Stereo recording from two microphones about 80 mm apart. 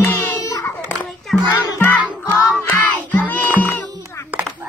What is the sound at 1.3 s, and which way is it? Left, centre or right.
Music, centre.